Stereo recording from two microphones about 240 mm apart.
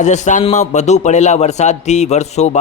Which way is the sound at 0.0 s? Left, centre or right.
Left.